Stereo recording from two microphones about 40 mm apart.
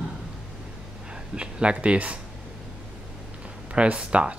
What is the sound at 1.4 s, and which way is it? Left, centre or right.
Speech, right.